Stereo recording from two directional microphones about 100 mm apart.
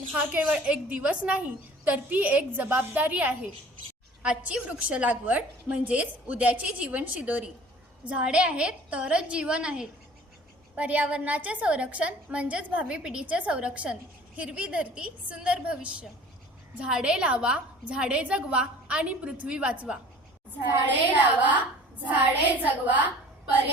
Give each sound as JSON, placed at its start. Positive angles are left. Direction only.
{"t": 0.1, "sound": "a woman's voice", "side_deg": -15}
{"t": 22.6, "sound": "a woman's voice", "side_deg": -15}